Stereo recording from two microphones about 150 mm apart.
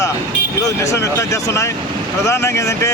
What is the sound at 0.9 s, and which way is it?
Speech, 20° left (ahead or behind).